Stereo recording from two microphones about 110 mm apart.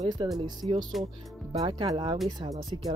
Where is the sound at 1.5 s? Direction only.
60° right (ahead or behind).